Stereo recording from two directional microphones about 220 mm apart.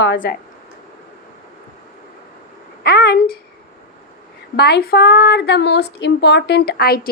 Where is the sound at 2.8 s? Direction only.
45° left (ahead or behind).